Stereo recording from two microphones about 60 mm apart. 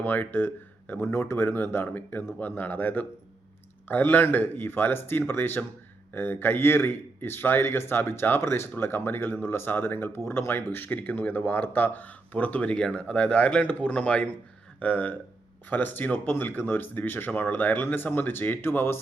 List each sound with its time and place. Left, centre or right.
0.0 s speech: left